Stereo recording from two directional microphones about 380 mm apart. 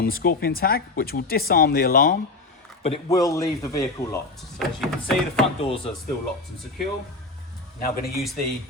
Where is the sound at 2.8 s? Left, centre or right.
Centre.